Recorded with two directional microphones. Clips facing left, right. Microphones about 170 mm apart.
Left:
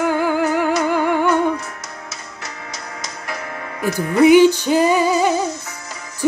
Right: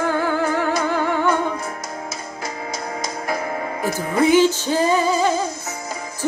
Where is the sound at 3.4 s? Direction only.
30° right (ahead or behind).